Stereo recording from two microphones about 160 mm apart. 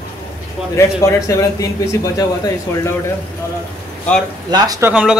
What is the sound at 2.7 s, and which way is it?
Speech, 15° left (ahead or behind).